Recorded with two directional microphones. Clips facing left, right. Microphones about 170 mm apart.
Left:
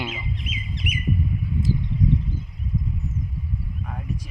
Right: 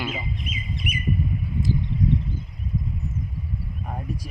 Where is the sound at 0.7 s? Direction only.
90° left.